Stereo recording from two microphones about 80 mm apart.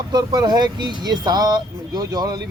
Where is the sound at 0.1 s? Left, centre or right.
Right.